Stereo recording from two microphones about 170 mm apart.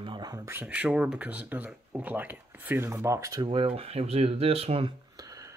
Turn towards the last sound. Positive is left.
turn(degrees=-35)  # may be behind; listen again after turning